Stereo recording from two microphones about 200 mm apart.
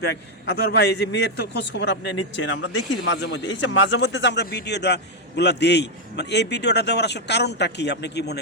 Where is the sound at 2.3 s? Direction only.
70° left (ahead or behind).